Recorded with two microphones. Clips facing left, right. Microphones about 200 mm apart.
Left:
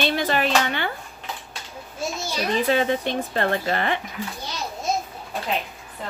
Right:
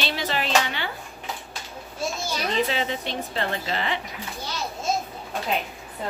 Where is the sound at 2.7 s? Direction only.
50° left (ahead or behind).